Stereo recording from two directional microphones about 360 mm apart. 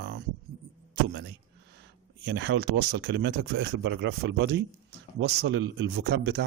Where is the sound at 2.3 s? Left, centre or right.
Right.